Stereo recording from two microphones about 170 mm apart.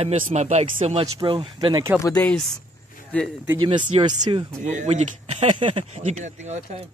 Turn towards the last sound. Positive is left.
turn(degrees=-40)  # may be behind; listen again after turning